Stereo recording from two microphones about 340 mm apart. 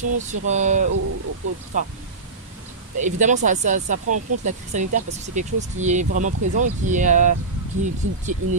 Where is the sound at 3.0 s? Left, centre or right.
Right.